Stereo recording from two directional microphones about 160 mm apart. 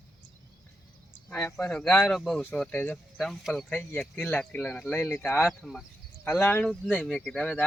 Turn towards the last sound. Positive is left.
turn(degrees=5)  # may be behind; listen again after turning